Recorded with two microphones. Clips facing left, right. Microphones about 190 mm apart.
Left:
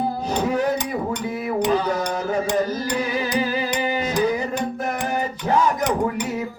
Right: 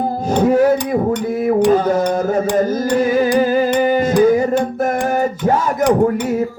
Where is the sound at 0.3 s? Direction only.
50° right (ahead or behind).